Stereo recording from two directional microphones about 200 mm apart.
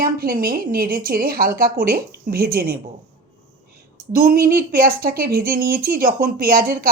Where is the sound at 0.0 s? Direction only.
45° right (ahead or behind).